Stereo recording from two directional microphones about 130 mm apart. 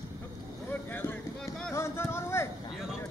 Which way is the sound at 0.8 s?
15° left (ahead or behind).